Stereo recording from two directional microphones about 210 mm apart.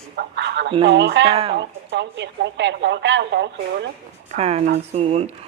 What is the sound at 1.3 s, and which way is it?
Speech, 25° right (ahead or behind).